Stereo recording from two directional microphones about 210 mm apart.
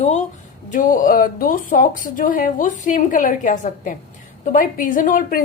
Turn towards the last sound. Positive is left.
turn(degrees=40)  # may be behind; listen again after turning